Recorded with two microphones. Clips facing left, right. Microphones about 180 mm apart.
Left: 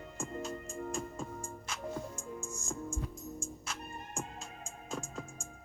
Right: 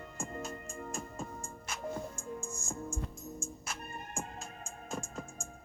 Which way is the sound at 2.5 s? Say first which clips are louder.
Even; 5° right (ahead or behind).